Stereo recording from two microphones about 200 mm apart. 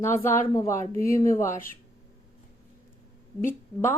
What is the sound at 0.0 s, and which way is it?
A woman's voice, 15° left (ahead or behind).